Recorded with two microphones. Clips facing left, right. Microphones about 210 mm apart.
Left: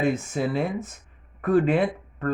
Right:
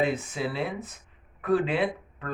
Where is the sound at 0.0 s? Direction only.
45° left (ahead or behind).